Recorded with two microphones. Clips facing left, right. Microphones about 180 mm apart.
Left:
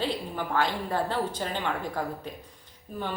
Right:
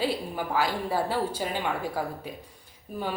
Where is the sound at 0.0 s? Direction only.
5° right (ahead or behind).